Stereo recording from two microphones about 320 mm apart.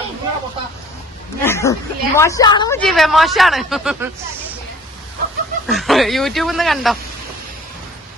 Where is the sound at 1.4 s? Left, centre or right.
Centre.